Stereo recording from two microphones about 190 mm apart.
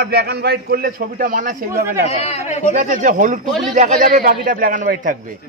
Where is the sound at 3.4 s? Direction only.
Centre (ahead or behind).